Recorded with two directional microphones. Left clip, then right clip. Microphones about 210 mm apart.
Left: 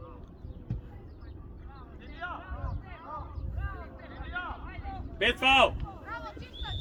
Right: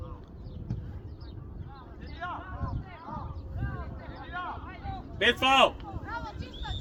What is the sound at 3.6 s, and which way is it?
Vehicle, 20° left (ahead or behind).